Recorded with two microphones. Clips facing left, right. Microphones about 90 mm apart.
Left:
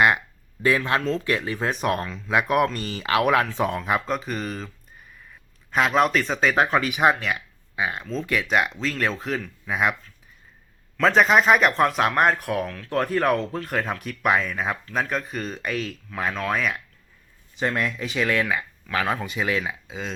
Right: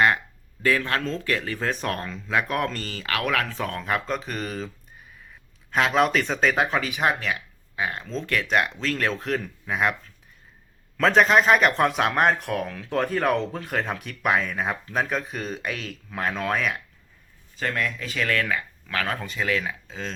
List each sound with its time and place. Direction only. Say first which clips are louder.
0.6 s speech: left 2 dB; 20° left (ahead or behind)
2.0 s speech: even; centre (ahead or behind)
2.3 s speech: left 4 dB; 15° left (ahead or behind); by 4.7 s centre (ahead or behind)
5.7 s speech: left 1 dB; centre (ahead or behind)
11.0 s speech: even; centre (ahead or behind)
17.6 s speech: left 2 dB; 20° left (ahead or behind)